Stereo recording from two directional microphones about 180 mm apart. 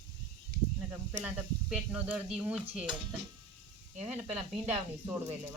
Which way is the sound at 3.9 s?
5° right (ahead or behind).